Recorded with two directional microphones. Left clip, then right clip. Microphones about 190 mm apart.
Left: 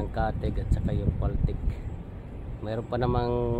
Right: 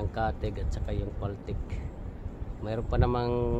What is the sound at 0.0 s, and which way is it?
Speech, 20° left (ahead or behind).